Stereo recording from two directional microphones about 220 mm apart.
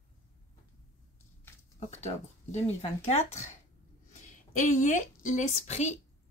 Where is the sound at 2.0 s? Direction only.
30° left (ahead or behind).